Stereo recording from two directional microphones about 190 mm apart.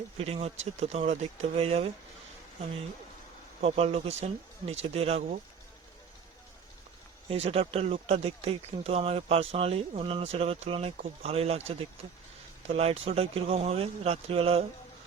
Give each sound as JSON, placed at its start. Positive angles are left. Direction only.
{"t": 0.2, "sound": "speech", "side_deg": -30}
{"t": 3.6, "sound": "speech", "side_deg": -35}
{"t": 7.3, "sound": "speech", "side_deg": -30}